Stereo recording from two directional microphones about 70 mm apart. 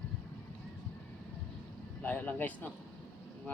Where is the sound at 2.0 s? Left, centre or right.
Left.